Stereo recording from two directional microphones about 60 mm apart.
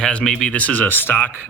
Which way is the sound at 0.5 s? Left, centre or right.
Left.